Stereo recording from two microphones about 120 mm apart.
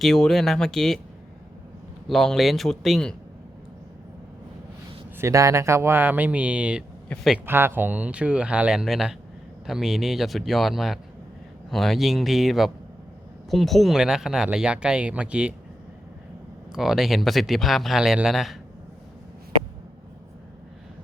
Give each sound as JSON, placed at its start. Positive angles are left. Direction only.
{"t": 0.0, "sound": "speech", "side_deg": 5}
{"t": 2.0, "sound": "speech", "side_deg": 0}
{"t": 5.1, "sound": "speech", "side_deg": -25}
{"t": 7.1, "sound": "speech", "side_deg": 10}
{"t": 7.4, "sound": "speech", "side_deg": -20}
{"t": 16.7, "sound": "speech", "side_deg": 0}